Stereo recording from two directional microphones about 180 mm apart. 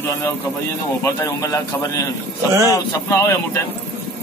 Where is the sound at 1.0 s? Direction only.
15° left (ahead or behind).